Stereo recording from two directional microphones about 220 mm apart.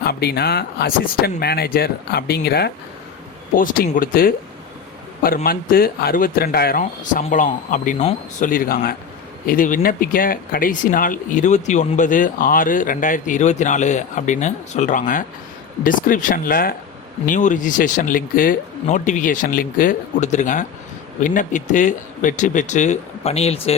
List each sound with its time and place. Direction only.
0.0 s speech: 45° left (ahead or behind); by 23.7 s 30° left (ahead or behind)